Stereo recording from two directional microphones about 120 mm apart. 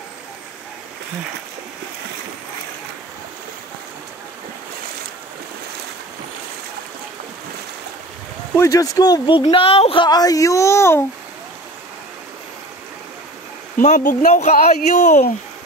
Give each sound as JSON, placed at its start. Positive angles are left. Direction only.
{"t": 8.5, "sound": "speech", "side_deg": 30}
{"t": 10.0, "sound": "speech", "side_deg": 30}
{"t": 13.7, "sound": "speech", "side_deg": 90}